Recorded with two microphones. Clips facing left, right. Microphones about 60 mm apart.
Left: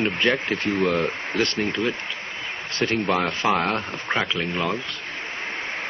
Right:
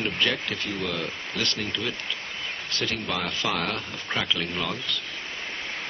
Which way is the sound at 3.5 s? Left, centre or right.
Left.